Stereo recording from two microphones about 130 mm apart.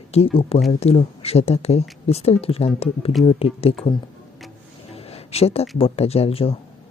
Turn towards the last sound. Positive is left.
turn(degrees=50)  # may be behind; listen again after turning